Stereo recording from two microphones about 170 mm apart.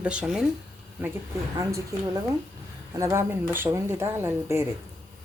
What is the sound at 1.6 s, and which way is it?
Speech, 20° right (ahead or behind).